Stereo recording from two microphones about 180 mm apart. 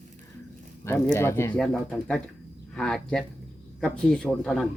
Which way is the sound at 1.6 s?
Centre (ahead or behind).